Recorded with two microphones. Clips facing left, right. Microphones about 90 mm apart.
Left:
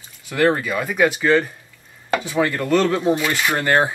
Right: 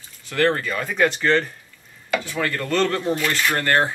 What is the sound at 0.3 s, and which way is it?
Speech, 10° left (ahead or behind).